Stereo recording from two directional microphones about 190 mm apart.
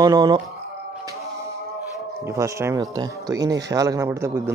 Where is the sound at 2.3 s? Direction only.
15° right (ahead or behind).